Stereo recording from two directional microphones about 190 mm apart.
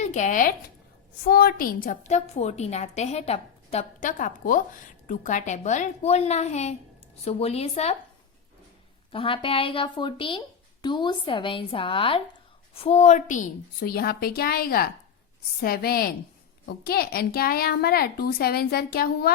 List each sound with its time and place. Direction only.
0.0 s a woman's voice: 40° left (ahead or behind)
9.1 s a woman's voice: 30° left (ahead or behind); by 19.3 s 55° left (ahead or behind)